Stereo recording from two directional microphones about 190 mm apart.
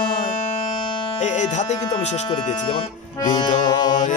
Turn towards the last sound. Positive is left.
turn(degrees=25)  # may be behind; listen again after turning